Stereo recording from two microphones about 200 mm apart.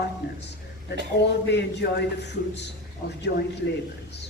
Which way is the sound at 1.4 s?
60° left (ahead or behind).